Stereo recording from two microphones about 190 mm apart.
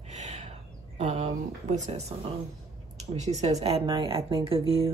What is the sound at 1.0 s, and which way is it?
Speech, 35° right (ahead or behind).